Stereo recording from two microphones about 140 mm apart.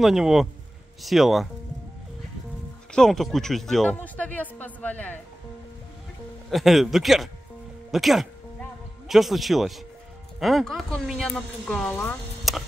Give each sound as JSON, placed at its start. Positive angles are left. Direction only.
{"t": 0.0, "sound": "speech", "side_deg": 0}
{"t": 2.9, "sound": "speech", "side_deg": 5}
{"t": 6.5, "sound": "speech", "side_deg": 0}
{"t": 11.9, "sound": "speech", "side_deg": 15}
{"t": 12.5, "sound": "a sound", "side_deg": 0}